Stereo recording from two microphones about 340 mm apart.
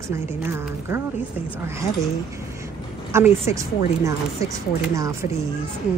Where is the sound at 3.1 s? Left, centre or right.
Centre.